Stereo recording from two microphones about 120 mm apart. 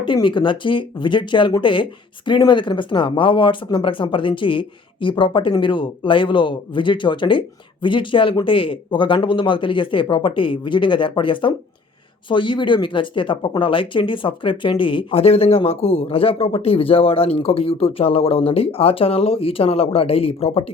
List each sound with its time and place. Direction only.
0.0 s speech: 40° left (ahead or behind)